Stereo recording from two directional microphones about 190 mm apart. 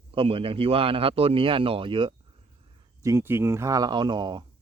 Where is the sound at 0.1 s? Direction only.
30° right (ahead or behind).